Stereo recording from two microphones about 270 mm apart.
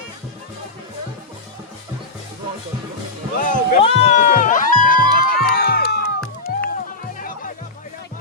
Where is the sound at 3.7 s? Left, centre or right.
Left.